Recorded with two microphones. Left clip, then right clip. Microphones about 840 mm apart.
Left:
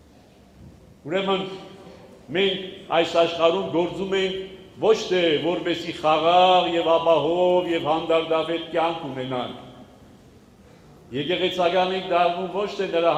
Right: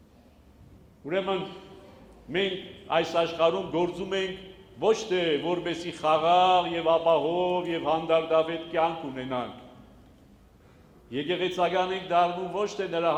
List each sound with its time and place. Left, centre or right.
1.0 s a man's voice: right
2.9 s a man's voice: right
11.1 s a man's voice: right